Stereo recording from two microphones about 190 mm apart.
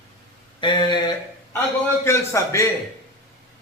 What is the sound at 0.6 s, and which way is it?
A man's voice, 25° left (ahead or behind).